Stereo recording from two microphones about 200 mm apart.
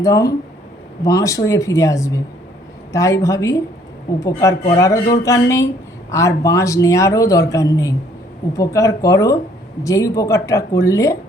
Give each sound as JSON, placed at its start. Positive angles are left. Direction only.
{"t": 0.0, "sound": "speech", "side_deg": 15}